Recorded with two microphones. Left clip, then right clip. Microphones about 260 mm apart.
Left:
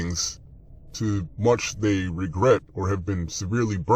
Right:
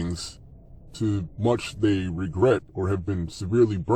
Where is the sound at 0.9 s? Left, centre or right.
Left.